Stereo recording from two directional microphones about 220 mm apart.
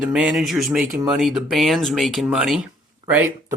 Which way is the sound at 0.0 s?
5° right (ahead or behind).